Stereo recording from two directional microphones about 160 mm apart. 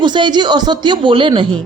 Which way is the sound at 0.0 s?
30° right (ahead or behind).